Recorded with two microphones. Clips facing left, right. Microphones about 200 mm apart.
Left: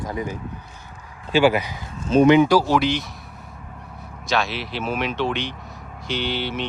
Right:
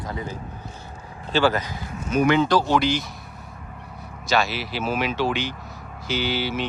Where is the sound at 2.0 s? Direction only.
25° left (ahead or behind); by 3.0 s centre (ahead or behind).